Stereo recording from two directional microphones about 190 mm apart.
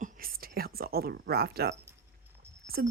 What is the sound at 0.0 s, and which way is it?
Whispering, 45° right (ahead or behind).